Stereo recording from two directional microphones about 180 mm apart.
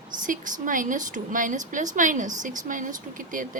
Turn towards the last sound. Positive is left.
turn(degrees=-50)  # may be behind; listen again after turning